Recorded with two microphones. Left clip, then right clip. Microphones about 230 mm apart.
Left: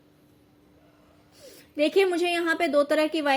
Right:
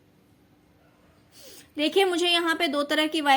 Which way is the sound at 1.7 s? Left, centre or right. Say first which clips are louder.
Left 1 dB; centre.